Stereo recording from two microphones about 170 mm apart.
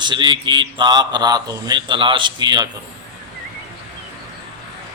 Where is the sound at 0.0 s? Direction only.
25° right (ahead or behind).